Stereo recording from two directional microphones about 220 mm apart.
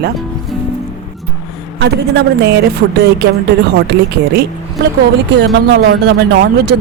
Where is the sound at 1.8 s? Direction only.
50° right (ahead or behind).